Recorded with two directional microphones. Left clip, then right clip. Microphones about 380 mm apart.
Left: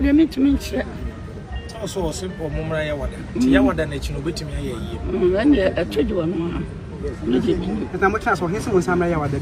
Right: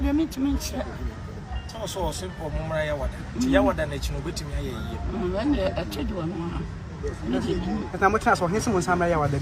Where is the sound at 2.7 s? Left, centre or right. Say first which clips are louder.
Left 1 dB; centre.